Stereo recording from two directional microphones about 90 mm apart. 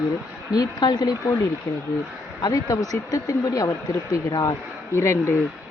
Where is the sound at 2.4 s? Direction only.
40° left (ahead or behind).